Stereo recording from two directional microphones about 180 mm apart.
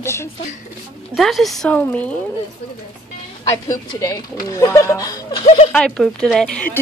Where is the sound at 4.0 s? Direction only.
20° left (ahead or behind).